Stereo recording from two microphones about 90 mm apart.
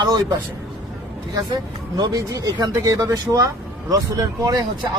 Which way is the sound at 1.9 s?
45° right (ahead or behind).